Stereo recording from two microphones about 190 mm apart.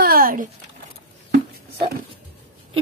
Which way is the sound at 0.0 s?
50° right (ahead or behind).